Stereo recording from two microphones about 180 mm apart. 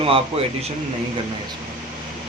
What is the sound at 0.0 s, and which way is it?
Speech, 30° right (ahead or behind).